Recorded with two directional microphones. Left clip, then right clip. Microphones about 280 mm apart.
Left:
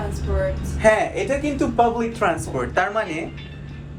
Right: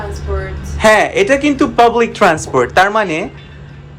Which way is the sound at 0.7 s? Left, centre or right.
Centre.